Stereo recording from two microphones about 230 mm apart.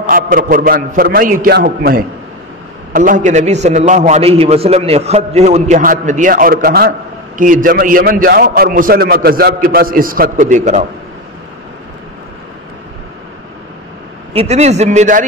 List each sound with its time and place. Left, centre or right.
0.1 s a man's voice: right
14.3 s a man's voice: right